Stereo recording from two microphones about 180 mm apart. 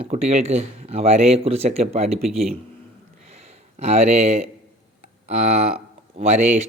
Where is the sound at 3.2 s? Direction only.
35° right (ahead or behind).